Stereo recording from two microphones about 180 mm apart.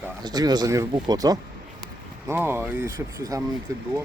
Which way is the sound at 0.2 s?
20° right (ahead or behind).